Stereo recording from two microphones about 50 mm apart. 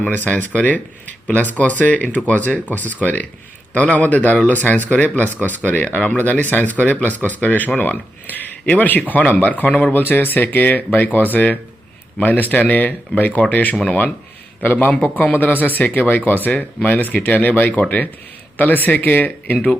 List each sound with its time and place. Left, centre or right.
0.3 s speech: left